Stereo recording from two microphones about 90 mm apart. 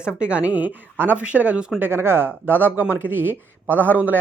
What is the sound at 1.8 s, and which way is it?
Speech, 25° right (ahead or behind).